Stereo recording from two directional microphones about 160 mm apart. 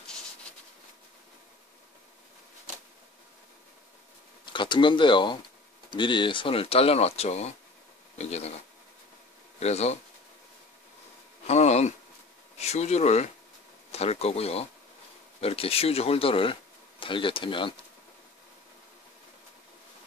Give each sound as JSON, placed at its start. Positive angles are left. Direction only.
{"t": 4.5, "sound": "speech", "side_deg": 30}
{"t": 9.6, "sound": "speech", "side_deg": 40}
{"t": 11.4, "sound": "a sound", "side_deg": 45}
{"t": 12.5, "sound": "speech", "side_deg": 45}